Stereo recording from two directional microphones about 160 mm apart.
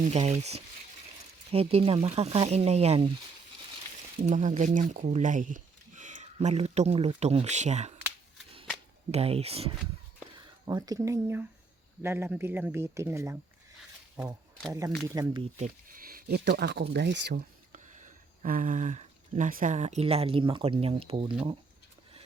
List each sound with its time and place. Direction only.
0.0 s speech: 45° right (ahead or behind)
4.2 s speech: 45° right (ahead or behind)
9.1 s speech: 40° right (ahead or behind)
10.3 s speech: 25° right (ahead or behind)
14.7 s speech: 20° right (ahead or behind)
15.5 s speech: 55° right (ahead or behind); by 17.4 s 90° right
17.7 s speech: 50° right (ahead or behind)